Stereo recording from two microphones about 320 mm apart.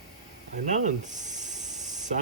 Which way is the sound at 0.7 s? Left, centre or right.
Right.